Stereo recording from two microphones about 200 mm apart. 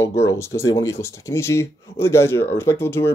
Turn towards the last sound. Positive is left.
turn(degrees=10)  # may be behind; listen again after turning